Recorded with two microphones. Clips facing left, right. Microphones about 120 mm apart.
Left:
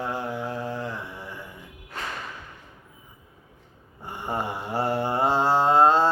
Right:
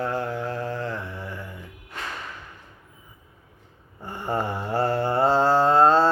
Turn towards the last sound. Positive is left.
turn(degrees=15)  # may be behind; listen again after turning